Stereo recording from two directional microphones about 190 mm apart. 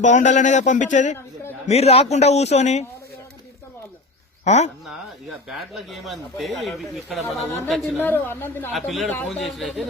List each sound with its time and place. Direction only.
0.0 s a man's voice: 40° left (ahead or behind)
4.4 s speech: 35° left (ahead or behind)
5.5 s a woman's voice: centre (ahead or behind)
8.7 s speech: centre (ahead or behind)